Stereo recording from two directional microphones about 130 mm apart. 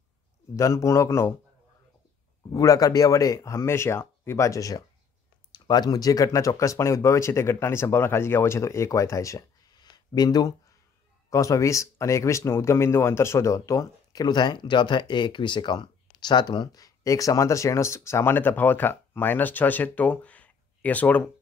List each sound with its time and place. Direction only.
0.6 s speech: 25° left (ahead or behind)
2.5 s speech: 25° left (ahead or behind)